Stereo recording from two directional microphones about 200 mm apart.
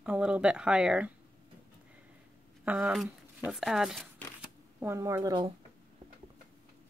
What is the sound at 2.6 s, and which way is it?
Speech, 10° right (ahead or behind).